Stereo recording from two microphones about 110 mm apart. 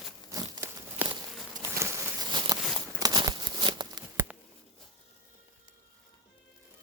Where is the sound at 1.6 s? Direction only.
25° right (ahead or behind).